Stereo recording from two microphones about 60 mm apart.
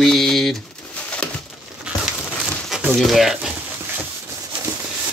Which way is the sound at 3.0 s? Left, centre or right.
Centre.